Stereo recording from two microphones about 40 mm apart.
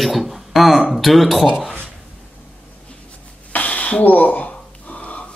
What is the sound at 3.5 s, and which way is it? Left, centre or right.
Gasp, left.